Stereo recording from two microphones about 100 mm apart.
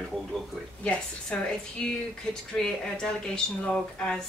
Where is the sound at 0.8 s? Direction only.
10° left (ahead or behind).